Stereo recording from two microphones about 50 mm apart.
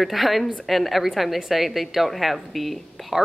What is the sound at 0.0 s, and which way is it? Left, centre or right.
A woman's voice, centre.